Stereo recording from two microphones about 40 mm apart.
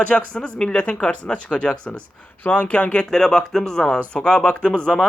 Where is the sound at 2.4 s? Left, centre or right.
Left.